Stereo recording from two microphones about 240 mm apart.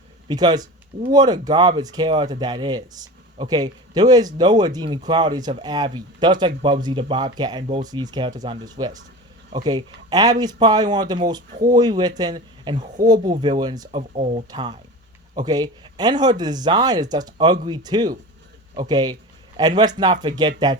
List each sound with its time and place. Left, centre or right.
0.3 s speech: centre